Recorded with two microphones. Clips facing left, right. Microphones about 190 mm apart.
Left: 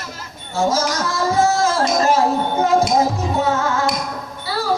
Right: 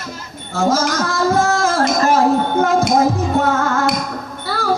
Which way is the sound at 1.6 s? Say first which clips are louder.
Right 1 dB; 50° right (ahead or behind).